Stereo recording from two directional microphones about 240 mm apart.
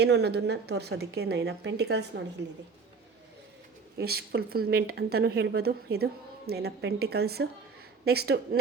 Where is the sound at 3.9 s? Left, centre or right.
Right.